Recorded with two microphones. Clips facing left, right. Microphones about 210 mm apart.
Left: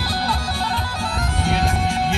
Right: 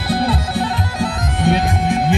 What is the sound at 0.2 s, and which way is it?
Music, 25° right (ahead or behind).